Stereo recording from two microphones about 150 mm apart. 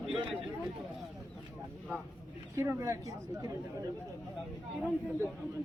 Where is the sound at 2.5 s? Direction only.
20° right (ahead or behind).